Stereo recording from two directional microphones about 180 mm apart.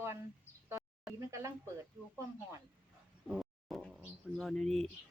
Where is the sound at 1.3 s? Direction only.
15° right (ahead or behind).